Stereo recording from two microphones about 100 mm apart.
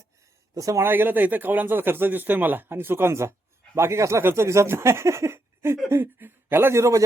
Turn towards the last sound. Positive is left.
turn(degrees=-30)  # may be behind; listen again after turning